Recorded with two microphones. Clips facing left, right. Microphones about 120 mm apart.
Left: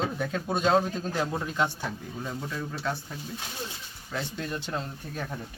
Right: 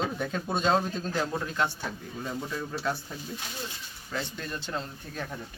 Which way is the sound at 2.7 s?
5° right (ahead or behind).